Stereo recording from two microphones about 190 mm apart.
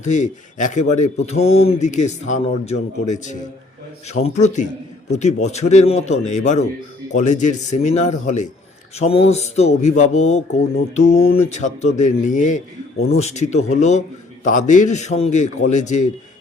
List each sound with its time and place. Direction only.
0.0 s speech: 40° left (ahead or behind)